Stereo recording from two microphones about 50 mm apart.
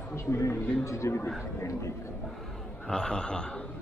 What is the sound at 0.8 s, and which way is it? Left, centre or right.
Speech, left.